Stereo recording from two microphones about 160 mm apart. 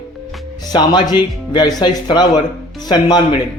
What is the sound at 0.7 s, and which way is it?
Speech, 25° left (ahead or behind).